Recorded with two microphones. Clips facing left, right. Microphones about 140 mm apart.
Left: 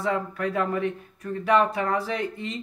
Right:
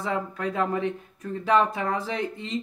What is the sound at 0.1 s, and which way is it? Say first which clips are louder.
Speech: right 1 dB; 25° right (ahead or behind).